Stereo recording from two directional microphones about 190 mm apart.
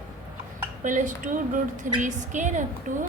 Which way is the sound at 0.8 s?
40° right (ahead or behind).